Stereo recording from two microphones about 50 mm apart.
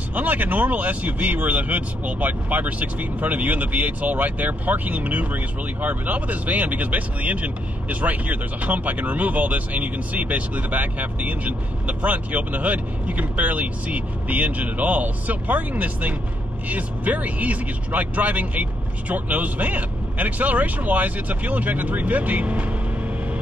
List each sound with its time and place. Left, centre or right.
0.1 s speech: right